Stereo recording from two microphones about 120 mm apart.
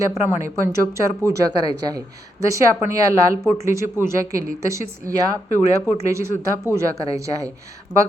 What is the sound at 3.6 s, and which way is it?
Speech, 25° right (ahead or behind).